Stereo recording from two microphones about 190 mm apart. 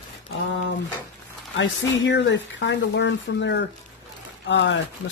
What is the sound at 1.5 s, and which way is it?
Speech, 75° left (ahead or behind).